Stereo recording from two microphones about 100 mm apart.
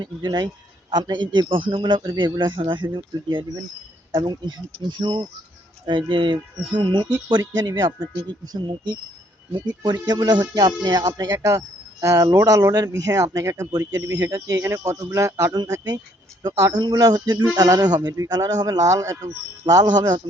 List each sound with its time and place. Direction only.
0.0 s speech: 45° right (ahead or behind)
9.5 s speech: 45° right (ahead or behind)